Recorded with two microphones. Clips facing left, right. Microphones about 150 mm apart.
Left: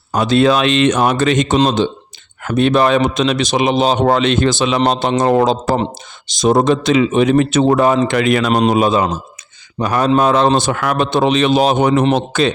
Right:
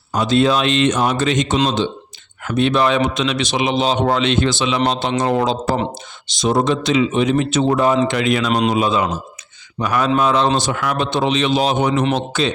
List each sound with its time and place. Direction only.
0.1 s a man's voice: 65° left (ahead or behind)